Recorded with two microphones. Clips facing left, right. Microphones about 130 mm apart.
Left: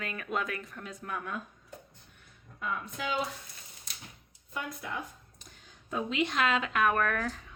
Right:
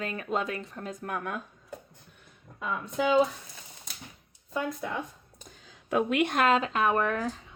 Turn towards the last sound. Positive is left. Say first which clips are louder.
# right 2 dB
turn(degrees=-20)  # may be behind; listen again after turning